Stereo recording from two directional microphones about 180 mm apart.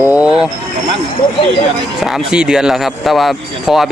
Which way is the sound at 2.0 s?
5° right (ahead or behind).